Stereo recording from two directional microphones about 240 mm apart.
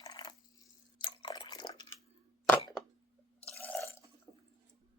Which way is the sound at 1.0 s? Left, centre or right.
Centre.